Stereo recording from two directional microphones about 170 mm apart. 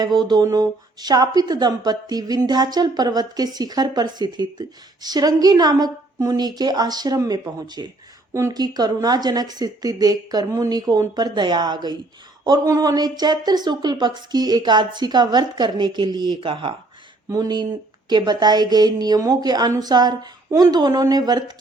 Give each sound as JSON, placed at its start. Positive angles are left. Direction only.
{"t": 0.3, "sound": "speech", "side_deg": -25}